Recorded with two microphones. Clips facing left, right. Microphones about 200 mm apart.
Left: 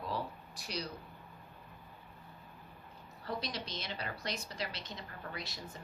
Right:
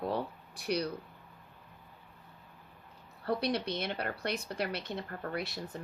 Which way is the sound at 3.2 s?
60° right (ahead or behind).